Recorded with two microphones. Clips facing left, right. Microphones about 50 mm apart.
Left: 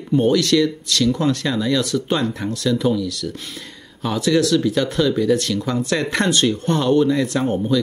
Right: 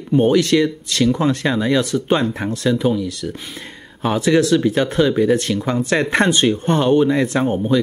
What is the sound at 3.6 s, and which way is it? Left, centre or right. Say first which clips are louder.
Speech: right 7 dB; right.